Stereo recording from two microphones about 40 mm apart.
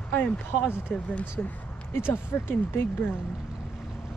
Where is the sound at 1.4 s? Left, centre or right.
Left.